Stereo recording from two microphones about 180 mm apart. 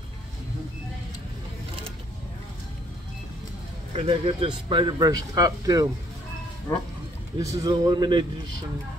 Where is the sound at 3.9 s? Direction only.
35° right (ahead or behind).